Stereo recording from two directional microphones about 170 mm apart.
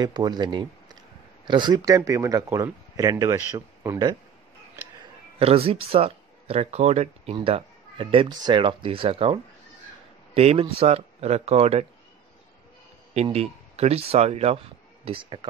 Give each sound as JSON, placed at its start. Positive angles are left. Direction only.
{"t": 0.0, "sound": "speech", "side_deg": -25}
{"t": 5.4, "sound": "speech", "side_deg": -35}
{"t": 13.1, "sound": "speech", "side_deg": -40}